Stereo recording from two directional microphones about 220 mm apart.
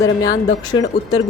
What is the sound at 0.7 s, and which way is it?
Speech, 20° left (ahead or behind).